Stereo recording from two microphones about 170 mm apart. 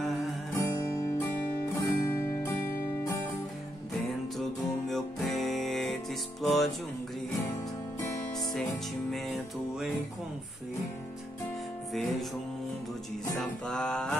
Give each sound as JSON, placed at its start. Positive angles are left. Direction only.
{"t": 0.6, "sound": "music", "side_deg": 15}
{"t": 4.4, "sound": "music", "side_deg": 0}
{"t": 9.1, "sound": "music", "side_deg": 0}
{"t": 11.9, "sound": "music", "side_deg": 0}
{"t": 13.4, "sound": "music", "side_deg": 5}